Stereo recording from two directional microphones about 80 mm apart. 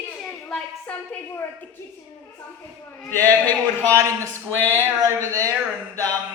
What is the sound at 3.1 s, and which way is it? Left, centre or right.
Speech, left.